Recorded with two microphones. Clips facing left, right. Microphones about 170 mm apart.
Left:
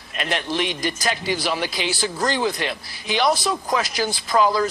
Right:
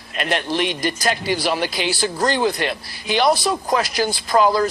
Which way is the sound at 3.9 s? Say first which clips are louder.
Right 2 dB; 50° right (ahead or behind).